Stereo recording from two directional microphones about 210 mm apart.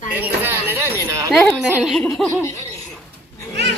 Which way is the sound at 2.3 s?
15° left (ahead or behind).